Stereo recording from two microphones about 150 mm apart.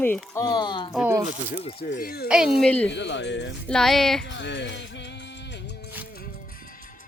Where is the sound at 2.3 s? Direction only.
5° right (ahead or behind).